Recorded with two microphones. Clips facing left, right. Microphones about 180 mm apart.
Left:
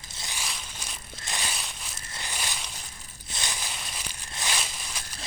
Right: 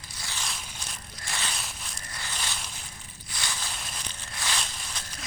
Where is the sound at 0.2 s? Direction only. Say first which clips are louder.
Even; 15° left (ahead or behind).